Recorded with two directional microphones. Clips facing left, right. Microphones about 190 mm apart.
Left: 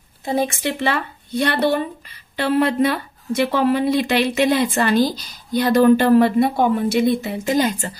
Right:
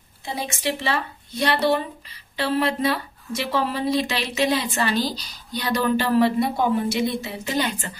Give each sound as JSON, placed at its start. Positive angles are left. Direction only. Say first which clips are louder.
{"t": 0.2, "sound": "a woman's voice", "louder": "left 8 dB", "side_deg": 45}